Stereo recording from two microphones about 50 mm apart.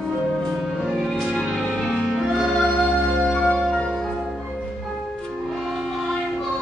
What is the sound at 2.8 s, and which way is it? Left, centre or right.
Music, centre.